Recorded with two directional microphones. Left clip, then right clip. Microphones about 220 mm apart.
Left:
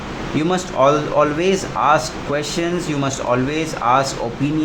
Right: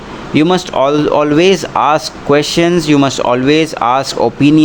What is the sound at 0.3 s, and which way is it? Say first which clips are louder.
Speech: right 7 dB; 40° right (ahead or behind).